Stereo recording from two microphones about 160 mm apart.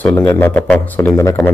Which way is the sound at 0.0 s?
10° left (ahead or behind).